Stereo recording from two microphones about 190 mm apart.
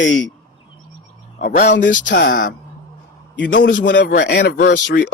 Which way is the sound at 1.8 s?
45° left (ahead or behind).